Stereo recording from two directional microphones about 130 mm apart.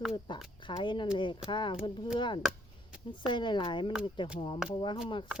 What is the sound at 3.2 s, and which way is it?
Speech, 35° left (ahead or behind).